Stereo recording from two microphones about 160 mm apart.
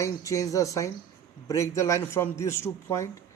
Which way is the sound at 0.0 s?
20° left (ahead or behind).